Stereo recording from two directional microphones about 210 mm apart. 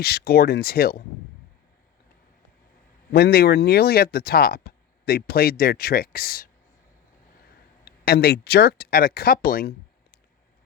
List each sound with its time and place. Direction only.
0.0 s speech: 50° left (ahead or behind)
3.1 s speech: 50° left (ahead or behind)
7.9 s speech: 50° left (ahead or behind)